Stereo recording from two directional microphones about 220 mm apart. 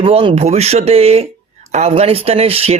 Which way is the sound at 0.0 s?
25° right (ahead or behind).